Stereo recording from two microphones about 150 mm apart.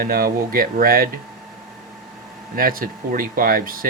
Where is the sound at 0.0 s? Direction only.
80° right.